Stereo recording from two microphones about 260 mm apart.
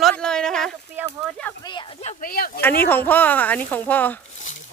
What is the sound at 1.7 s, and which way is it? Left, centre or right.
Speech, left.